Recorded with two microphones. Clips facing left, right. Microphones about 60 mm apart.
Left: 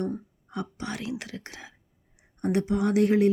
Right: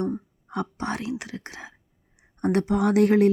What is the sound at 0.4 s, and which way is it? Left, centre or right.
Whispering, right.